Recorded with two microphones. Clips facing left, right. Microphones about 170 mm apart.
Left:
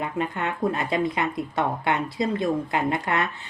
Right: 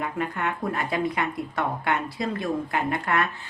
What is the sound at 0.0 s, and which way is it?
Speech, 25° left (ahead or behind).